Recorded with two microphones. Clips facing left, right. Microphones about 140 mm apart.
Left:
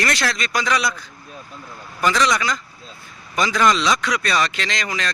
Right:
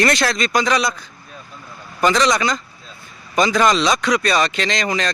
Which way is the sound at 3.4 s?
20° right (ahead or behind).